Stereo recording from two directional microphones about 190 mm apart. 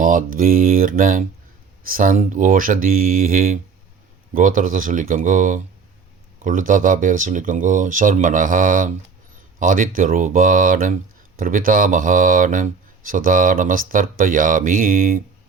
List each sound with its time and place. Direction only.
0.0 s speech: 45° right (ahead or behind)